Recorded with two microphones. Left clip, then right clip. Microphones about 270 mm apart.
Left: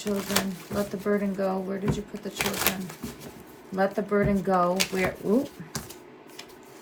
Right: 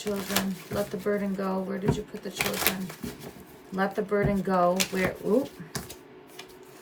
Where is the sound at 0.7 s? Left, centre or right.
Centre.